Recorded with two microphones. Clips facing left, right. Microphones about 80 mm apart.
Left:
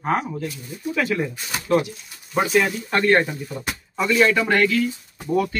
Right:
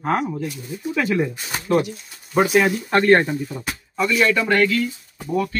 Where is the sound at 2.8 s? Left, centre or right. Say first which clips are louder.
Right 4 dB; right.